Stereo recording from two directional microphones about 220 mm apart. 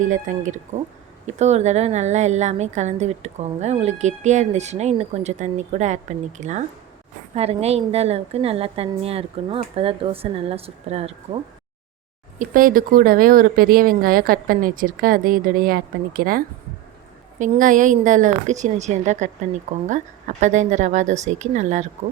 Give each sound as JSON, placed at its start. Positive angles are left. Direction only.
{"t": 0.0, "sound": "a woman's voice", "side_deg": -35}
{"t": 12.4, "sound": "a woman's voice", "side_deg": -40}